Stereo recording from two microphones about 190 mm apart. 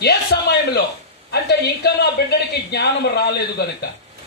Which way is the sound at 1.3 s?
60° left (ahead or behind).